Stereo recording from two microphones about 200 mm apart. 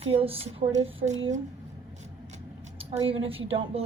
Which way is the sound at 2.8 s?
25° right (ahead or behind).